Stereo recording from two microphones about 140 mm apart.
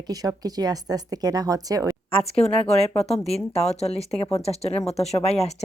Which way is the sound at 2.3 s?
50° left (ahead or behind).